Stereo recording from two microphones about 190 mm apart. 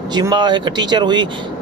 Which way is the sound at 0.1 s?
25° right (ahead or behind).